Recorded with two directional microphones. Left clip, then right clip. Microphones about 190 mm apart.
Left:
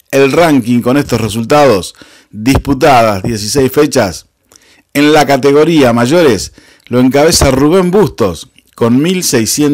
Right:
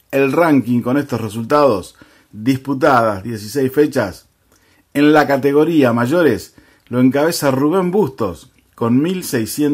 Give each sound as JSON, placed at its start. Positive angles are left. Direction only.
{"t": 0.1, "sound": "speech", "side_deg": 25}